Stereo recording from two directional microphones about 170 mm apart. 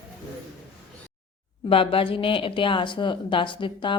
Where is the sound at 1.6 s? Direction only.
30° left (ahead or behind).